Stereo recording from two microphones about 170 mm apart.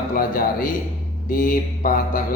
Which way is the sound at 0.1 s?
55° left (ahead or behind).